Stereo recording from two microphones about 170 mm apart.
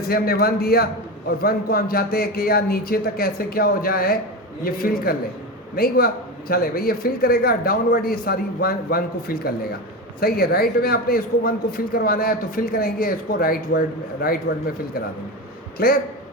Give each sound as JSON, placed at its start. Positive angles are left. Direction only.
{"t": 0.1, "sound": "a man's voice", "side_deg": 65}